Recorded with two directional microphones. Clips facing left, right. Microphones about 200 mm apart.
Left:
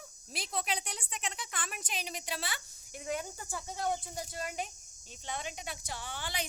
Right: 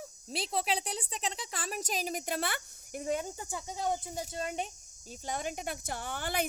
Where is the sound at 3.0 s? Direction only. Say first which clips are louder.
Right 4 dB; 30° right (ahead or behind).